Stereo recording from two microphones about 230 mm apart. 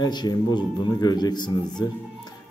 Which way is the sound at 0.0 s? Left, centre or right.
Centre.